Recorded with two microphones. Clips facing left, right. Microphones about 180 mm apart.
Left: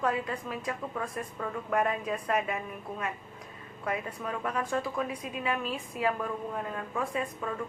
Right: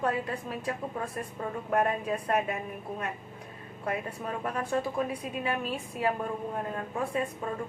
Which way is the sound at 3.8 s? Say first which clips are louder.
Even; 30° right (ahead or behind).